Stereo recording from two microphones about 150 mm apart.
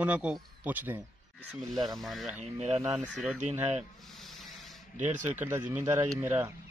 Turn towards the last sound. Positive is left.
turn(degrees=-15)  # may be behind; listen again after turning